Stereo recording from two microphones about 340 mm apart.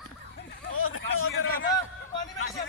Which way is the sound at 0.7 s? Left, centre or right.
Left.